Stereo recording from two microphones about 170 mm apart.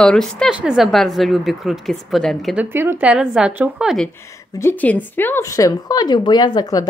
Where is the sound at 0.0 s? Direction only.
5° left (ahead or behind).